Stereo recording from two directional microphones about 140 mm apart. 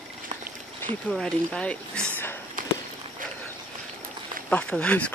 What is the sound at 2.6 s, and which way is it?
Walk, 75° right (ahead or behind).